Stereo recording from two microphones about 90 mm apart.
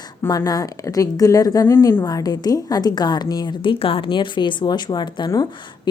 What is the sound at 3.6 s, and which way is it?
A woman's voice, 85° left.